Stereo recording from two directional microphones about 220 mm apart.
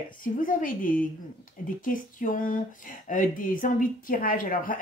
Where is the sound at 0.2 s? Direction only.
40° left (ahead or behind).